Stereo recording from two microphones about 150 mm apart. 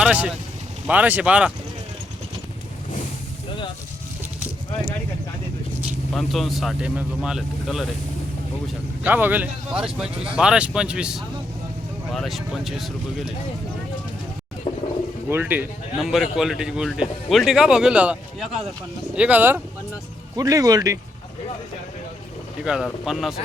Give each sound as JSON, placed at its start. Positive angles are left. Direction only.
{"t": 0.0, "sound": "speech", "side_deg": -5}
{"t": 6.1, "sound": "speech", "side_deg": 0}
{"t": 9.0, "sound": "speech", "side_deg": -10}
{"t": 15.3, "sound": "speech", "side_deg": -15}
{"t": 16.0, "sound": "speech", "side_deg": 0}
{"t": 20.3, "sound": "speech", "side_deg": -25}
{"t": 22.6, "sound": "speech", "side_deg": -5}